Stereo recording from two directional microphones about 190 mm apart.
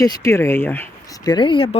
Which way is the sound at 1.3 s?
25° left (ahead or behind).